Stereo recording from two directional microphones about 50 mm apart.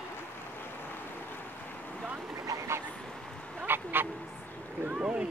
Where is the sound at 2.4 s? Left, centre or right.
Right.